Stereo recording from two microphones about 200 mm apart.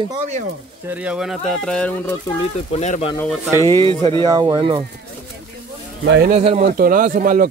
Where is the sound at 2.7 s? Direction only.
35° left (ahead or behind).